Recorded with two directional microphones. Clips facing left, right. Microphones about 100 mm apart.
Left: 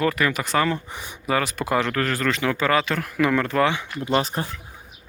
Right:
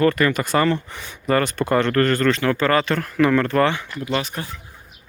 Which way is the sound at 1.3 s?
5° left (ahead or behind).